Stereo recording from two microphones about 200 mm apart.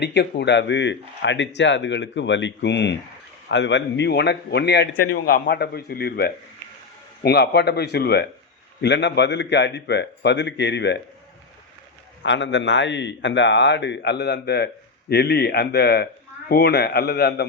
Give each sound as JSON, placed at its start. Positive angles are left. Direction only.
{"t": 0.0, "sound": "speech", "side_deg": 55}
{"t": 12.2, "sound": "a man's voice", "side_deg": 65}